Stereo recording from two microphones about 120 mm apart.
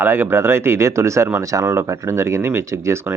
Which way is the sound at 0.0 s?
20° right (ahead or behind).